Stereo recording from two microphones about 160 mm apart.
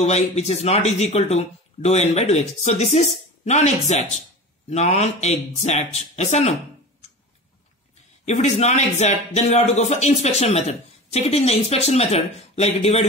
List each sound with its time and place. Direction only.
0.0 s speech: 40° left (ahead or behind)
8.3 s speech: 45° left (ahead or behind)